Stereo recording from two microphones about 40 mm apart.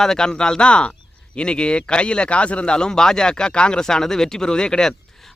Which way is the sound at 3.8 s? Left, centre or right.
Centre.